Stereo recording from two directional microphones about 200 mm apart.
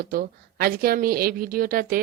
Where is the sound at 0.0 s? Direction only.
45° right (ahead or behind).